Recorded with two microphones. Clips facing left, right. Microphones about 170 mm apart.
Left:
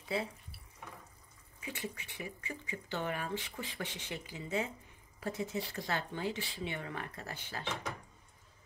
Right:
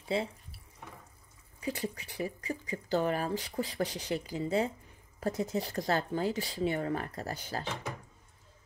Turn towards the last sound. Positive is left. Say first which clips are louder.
# right 7 dB
turn(degrees=-40)  # may be behind; listen again after turning